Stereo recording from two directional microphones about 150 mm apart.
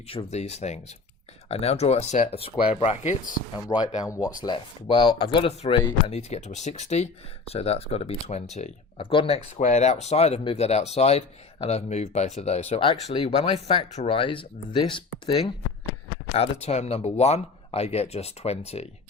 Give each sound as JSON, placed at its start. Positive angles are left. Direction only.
{"t": 0.1, "sound": "speech", "side_deg": 40}
{"t": 3.7, "sound": "speech", "side_deg": 25}
{"t": 9.0, "sound": "speech", "side_deg": 35}
{"t": 16.3, "sound": "speech", "side_deg": 45}